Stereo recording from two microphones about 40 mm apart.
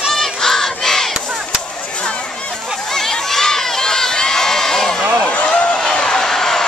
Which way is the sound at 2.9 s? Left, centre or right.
Centre.